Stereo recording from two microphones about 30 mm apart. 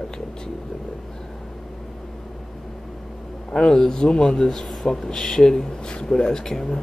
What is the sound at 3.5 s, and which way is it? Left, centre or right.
Speech, centre.